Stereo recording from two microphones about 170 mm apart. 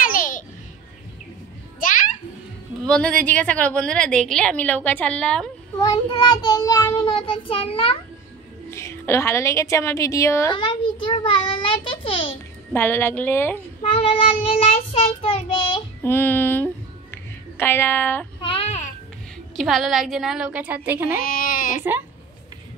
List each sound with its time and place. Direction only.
0.0 s babbling: 50° left (ahead or behind)
1.8 s children playing: 50° left (ahead or behind)
2.8 s a woman's voice: 5° left (ahead or behind)
5.8 s child singing: 25° left (ahead or behind)
8.6 s a woman's voice: 15° left (ahead or behind)
10.6 s child singing: 30° left (ahead or behind)
12.7 s a woman's voice: 15° left (ahead or behind)
13.8 s child singing: 35° left (ahead or behind)
16.0 s speech: 10° left (ahead or behind)
18.4 s a sound: 35° left (ahead or behind)
19.5 s a woman's voice: centre (ahead or behind)
21.2 s a sound: 55° left (ahead or behind)